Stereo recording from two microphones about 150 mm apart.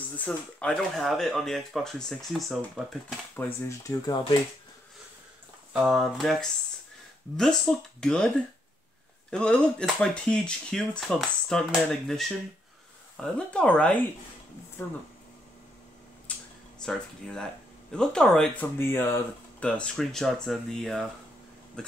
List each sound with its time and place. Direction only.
0.2 s speech: 10° left (ahead or behind)
3.3 s speech: 15° left (ahead or behind)
5.7 s speech: centre (ahead or behind)
9.3 s speech: 5° left (ahead or behind)
16.3 s a sound: 10° left (ahead or behind)
16.8 s speech: 5° left (ahead or behind)
18.8 s speech: 15° left (ahead or behind)